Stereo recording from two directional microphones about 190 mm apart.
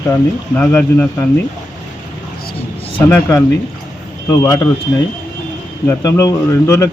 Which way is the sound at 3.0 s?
15° left (ahead or behind).